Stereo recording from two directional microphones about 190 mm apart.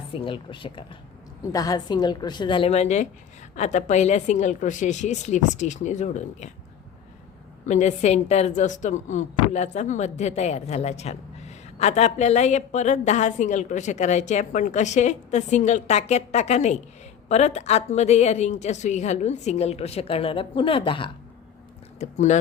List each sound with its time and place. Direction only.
0.1 s a woman's voice: 25° left (ahead or behind)
7.6 s a woman's voice: 40° left (ahead or behind)